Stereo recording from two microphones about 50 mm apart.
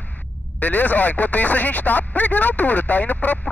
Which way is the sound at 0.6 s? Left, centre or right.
Left.